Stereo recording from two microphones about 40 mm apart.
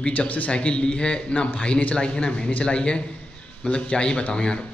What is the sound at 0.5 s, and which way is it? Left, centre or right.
Speech, left.